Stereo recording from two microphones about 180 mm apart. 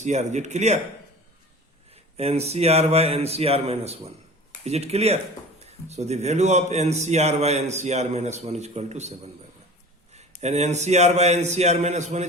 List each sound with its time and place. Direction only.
0.0 s a man's voice: 40° right (ahead or behind)
1.9 s a man's voice: 35° right (ahead or behind)
10.2 s a man's voice: 40° right (ahead or behind)